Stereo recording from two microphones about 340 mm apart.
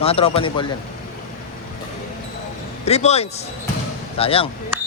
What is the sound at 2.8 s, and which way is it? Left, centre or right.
A man's voice, centre.